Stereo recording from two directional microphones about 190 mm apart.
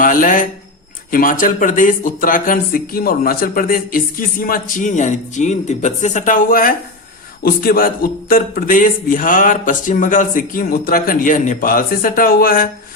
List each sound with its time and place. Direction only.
0.0 s speech: 45° left (ahead or behind)